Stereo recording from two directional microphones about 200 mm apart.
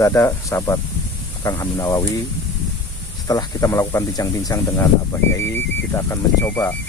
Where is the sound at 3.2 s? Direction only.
15° left (ahead or behind).